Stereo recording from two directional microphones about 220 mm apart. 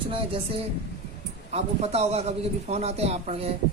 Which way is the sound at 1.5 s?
30° right (ahead or behind).